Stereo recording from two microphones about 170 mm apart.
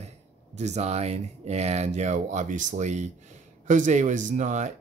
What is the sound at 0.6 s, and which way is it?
Speech, 40° right (ahead or behind).